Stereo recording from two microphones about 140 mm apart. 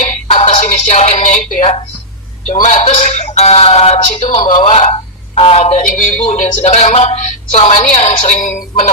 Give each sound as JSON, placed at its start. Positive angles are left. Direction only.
{"t": 0.3, "sound": "a sound", "side_deg": 55}
{"t": 2.5, "sound": "speech", "side_deg": 65}
{"t": 4.4, "sound": "speech", "side_deg": 35}
{"t": 4.7, "sound": "telephone", "side_deg": 55}
{"t": 5.4, "sound": "speech", "side_deg": 50}
{"t": 6.2, "sound": "a woman's voice", "side_deg": 65}